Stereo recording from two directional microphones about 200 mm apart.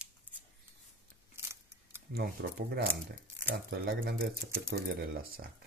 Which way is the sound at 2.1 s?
50° right (ahead or behind).